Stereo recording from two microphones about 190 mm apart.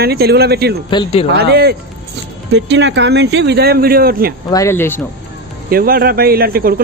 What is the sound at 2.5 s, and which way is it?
Speech, 70° right (ahead or behind).